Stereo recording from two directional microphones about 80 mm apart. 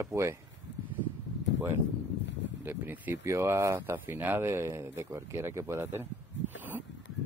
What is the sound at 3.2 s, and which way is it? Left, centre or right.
Speech, right.